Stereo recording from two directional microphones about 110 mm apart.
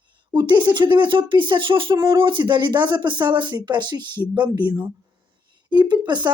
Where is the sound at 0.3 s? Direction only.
40° right (ahead or behind).